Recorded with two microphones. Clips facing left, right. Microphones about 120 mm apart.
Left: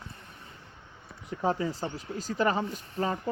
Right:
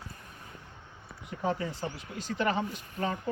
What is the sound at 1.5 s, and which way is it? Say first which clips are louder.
Speech: left 3 dB; 35° left (ahead or behind).